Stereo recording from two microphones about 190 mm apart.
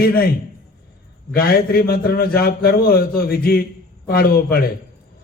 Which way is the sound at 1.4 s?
55° left (ahead or behind).